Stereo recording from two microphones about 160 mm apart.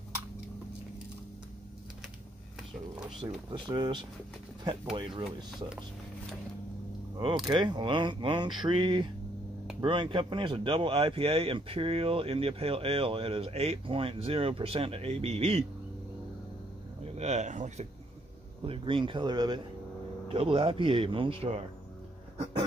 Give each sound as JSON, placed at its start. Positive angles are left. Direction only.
{"t": 3.2, "sound": "speech", "side_deg": -25}
{"t": 7.2, "sound": "speech", "side_deg": -30}
{"t": 17.0, "sound": "speech", "side_deg": -45}
{"t": 18.7, "sound": "speech", "side_deg": -30}
{"t": 20.2, "sound": "speech", "side_deg": -35}